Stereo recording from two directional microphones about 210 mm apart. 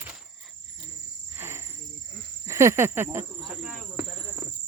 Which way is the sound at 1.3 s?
10° right (ahead or behind).